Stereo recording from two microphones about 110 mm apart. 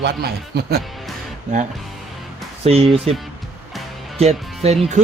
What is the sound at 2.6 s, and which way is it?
Speech, 65° right (ahead or behind).